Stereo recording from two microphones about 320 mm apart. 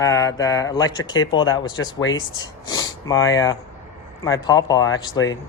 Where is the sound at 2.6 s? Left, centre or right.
Centre.